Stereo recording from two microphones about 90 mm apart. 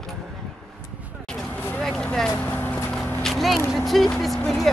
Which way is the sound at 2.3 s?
20° left (ahead or behind).